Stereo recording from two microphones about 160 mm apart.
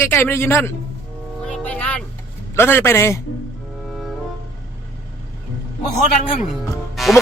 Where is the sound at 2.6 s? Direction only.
15° left (ahead or behind).